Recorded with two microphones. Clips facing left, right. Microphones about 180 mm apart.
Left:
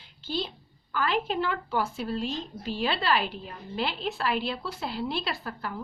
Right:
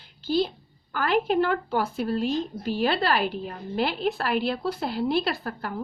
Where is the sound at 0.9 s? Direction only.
50° right (ahead or behind).